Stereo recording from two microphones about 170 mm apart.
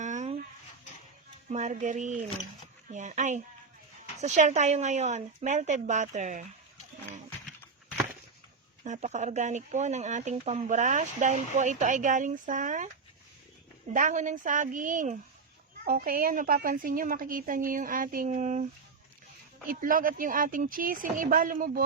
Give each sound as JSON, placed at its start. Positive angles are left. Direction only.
{"t": 0.0, "sound": "dog", "side_deg": -45}
{"t": 1.5, "sound": "speech", "side_deg": -45}
{"t": 8.8, "sound": "speech", "side_deg": -40}
{"t": 13.9, "sound": "a woman's voice", "side_deg": -50}